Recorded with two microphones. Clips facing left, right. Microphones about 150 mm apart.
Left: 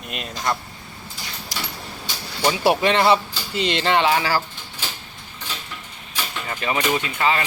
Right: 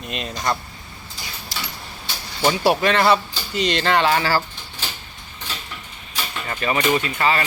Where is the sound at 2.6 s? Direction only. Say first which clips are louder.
Left 1 dB; 20° left (ahead or behind).